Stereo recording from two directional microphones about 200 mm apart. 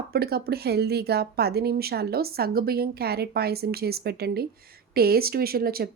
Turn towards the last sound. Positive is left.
turn(degrees=-50)  # may be behind; listen again after turning